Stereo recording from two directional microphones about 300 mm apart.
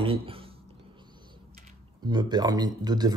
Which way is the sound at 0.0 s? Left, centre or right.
Centre.